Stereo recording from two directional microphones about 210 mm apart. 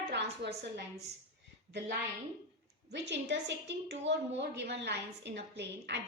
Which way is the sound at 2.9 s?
55° right (ahead or behind).